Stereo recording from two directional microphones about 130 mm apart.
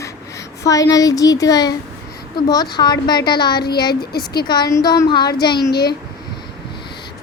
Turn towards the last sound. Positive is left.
turn(degrees=35)  # may be behind; listen again after turning